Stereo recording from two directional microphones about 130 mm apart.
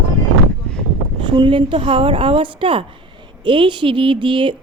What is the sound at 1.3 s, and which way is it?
Speech, 40° right (ahead or behind).